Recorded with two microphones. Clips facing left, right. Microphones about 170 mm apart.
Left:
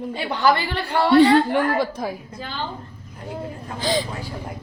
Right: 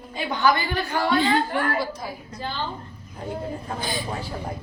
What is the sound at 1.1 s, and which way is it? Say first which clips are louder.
Speech: left 9 dB; 75° left (ahead or behind).